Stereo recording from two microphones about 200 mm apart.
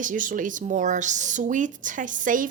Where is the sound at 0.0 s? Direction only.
40° right (ahead or behind).